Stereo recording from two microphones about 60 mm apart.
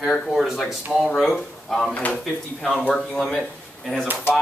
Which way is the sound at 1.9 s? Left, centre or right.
Left.